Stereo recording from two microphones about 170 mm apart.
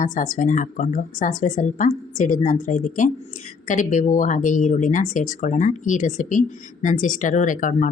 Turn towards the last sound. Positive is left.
turn(degrees=50)  # may be behind; listen again after turning